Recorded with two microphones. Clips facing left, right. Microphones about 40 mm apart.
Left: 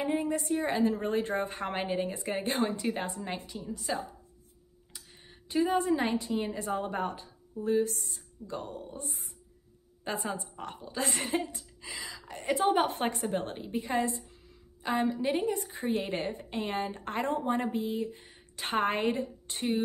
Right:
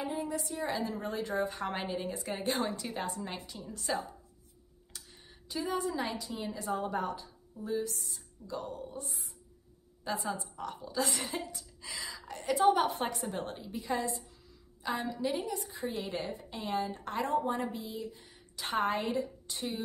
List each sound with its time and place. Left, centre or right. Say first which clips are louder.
0.0 s a woman's voice: left 5 dB; left
3.4 s a woman's voice: left 2 dB; centre
4.9 s a sound: left 1 dB; centre
5.5 s a woman's voice: left 7 dB; left
11.8 s speech: left 1 dB; centre
12.4 s a woman's voice: even; left